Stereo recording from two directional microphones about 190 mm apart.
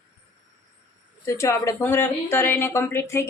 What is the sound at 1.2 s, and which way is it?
Speech, 15° left (ahead or behind).